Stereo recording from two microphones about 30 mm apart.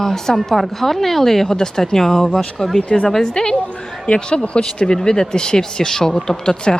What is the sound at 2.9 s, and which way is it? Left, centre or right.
Speech, left.